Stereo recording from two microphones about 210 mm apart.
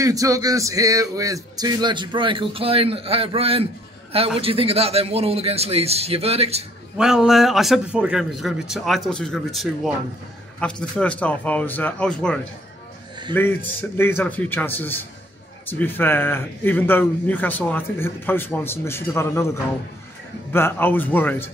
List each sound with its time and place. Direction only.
0.0 s speech: 15° right (ahead or behind)
7.0 s a man's voice: centre (ahead or behind)